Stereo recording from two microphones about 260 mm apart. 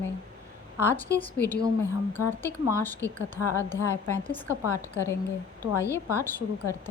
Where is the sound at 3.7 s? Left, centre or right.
Centre.